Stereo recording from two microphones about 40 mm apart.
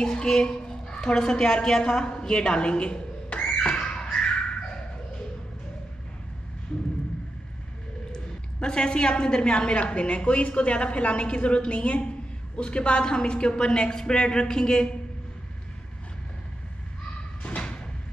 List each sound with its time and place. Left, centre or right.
0.0 s a woman's voice: centre
3.6 s squawk: left
8.1 s a woman's voice: left
17.4 s door: left